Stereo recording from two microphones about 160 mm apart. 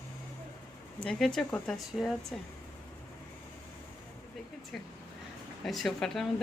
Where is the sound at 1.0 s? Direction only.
5° left (ahead or behind).